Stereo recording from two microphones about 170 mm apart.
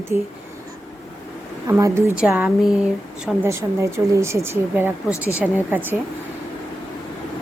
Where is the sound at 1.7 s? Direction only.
15° right (ahead or behind).